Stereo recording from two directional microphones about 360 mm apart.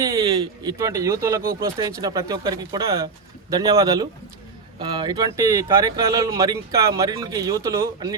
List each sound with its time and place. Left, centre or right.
0.0 s a man's voice: centre
1.4 s speech: right
1.8 s speech: centre